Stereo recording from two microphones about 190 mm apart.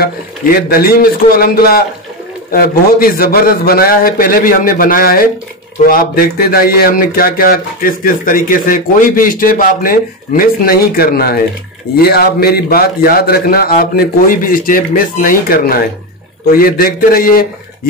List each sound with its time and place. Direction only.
0.0 s speech: 50° left (ahead or behind)